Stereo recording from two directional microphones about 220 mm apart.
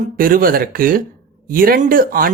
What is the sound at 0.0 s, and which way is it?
Speech, 40° right (ahead or behind).